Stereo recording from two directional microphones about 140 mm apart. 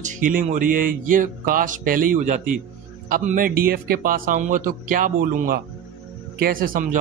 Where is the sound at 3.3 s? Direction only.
85° right.